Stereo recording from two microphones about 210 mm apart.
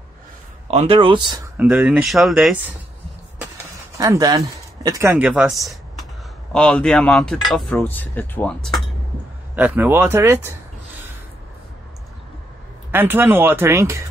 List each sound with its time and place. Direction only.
0.7 s speech: 30° right (ahead or behind)
1.6 s speech: 10° right (ahead or behind)
4.0 s speech: 15° right (ahead or behind)
6.5 s speech: 5° left (ahead or behind)
9.6 s speech: 10° right (ahead or behind)
12.9 s speech: 10° right (ahead or behind)